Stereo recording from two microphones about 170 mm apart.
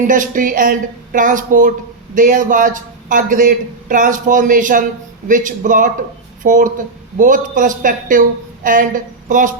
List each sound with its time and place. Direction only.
0.1 s speech: 50° right (ahead or behind)